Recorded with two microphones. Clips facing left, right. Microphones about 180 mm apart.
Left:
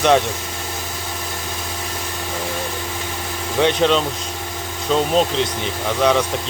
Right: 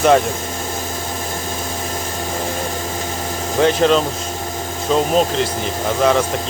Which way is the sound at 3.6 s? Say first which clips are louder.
Right 2 dB; centre (ahead or behind).